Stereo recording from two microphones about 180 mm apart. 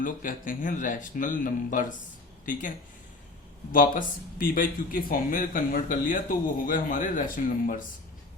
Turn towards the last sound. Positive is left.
turn(degrees=50)  # may be behind; listen again after turning